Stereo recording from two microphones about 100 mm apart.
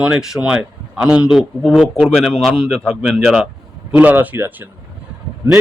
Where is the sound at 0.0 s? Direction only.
5° right (ahead or behind).